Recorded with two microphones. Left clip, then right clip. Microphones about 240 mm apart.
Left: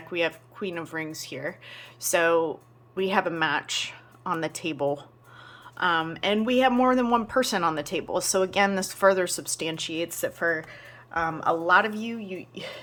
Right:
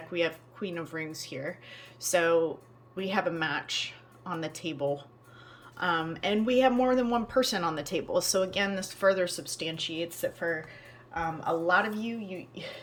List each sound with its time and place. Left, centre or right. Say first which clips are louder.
0.1 s speech: left 3 dB; centre